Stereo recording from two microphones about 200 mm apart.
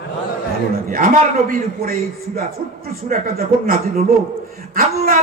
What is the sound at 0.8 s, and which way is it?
A man's voice, 45° right (ahead or behind).